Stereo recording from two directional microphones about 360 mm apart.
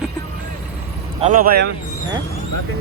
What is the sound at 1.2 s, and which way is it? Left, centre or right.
Speech, right.